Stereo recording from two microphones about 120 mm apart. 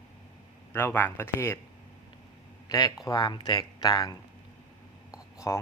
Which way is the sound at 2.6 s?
35° left (ahead or behind).